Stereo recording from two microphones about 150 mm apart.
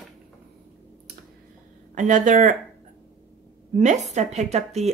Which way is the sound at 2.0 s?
55° right (ahead or behind).